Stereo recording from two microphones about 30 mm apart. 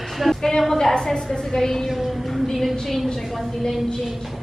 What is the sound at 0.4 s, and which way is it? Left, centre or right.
A woman's voice, centre.